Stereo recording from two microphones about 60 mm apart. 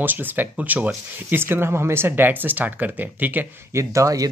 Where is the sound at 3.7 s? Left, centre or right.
Right.